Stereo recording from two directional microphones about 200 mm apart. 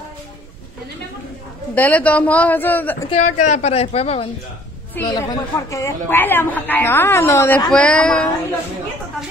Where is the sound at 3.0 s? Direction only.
35° left (ahead or behind).